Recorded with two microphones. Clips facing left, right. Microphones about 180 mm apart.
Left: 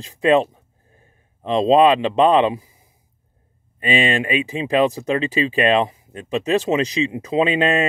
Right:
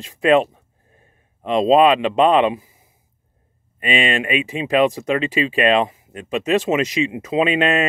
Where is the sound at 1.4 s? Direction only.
30° left (ahead or behind).